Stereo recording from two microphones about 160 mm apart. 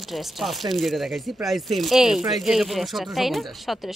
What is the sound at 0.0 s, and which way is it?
A woman's voice, centre (ahead or behind).